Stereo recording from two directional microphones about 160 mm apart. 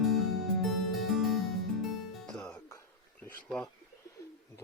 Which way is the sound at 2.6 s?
15° left (ahead or behind).